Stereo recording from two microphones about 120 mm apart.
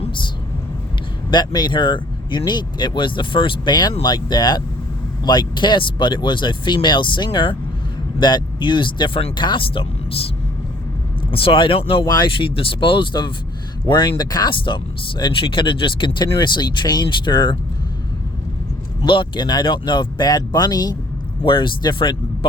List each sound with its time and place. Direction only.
1.3 s speech: 35° left (ahead or behind)
11.3 s speech: 50° left (ahead or behind)
12.0 s speech: 30° left (ahead or behind)
12.4 s speech: 45° left (ahead or behind)
19.0 s speech: 45° left (ahead or behind)
21.4 s speech: 45° left (ahead or behind)